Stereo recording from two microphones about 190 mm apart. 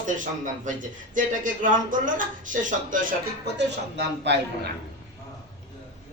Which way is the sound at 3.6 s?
65° right (ahead or behind).